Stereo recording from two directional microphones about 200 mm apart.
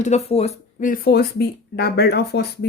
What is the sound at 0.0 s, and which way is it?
Speech, 30° left (ahead or behind).